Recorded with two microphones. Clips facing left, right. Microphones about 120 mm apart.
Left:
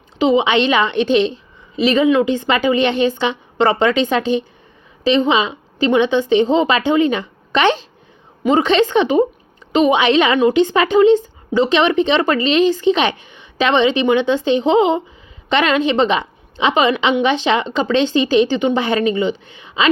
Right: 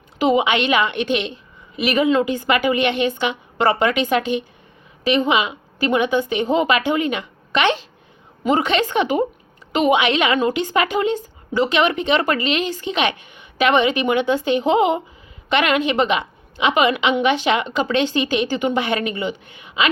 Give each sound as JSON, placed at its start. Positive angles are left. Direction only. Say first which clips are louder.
{"t": 0.2, "sound": "a woman's voice", "louder": "left 3 dB", "side_deg": 25}